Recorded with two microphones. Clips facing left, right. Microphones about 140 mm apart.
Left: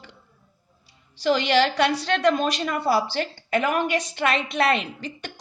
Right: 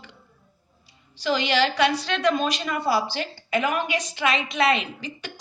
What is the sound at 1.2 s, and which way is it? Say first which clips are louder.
A woman's voice: left 2 dB; 55° left (ahead or behind).